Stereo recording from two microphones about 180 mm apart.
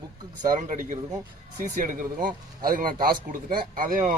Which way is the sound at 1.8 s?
50° right (ahead or behind).